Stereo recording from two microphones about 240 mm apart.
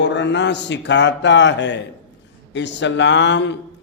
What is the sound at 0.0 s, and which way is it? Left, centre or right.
Mantra, left.